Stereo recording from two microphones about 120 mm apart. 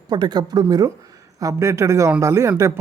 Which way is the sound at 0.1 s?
35° right (ahead or behind).